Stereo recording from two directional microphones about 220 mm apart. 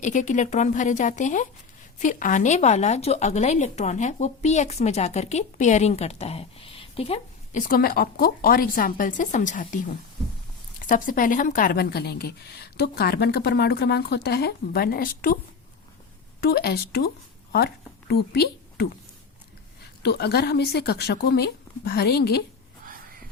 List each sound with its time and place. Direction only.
0.0 s speech: 35° left (ahead or behind)
16.4 s speech: 45° left (ahead or behind)
18.1 s a woman's voice: 45° left (ahead or behind)
20.0 s speech: 50° left (ahead or behind)